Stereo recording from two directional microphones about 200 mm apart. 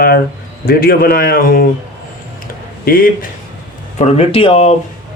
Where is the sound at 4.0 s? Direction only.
30° left (ahead or behind).